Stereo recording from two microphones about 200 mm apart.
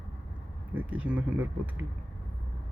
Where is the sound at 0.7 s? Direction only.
5° right (ahead or behind).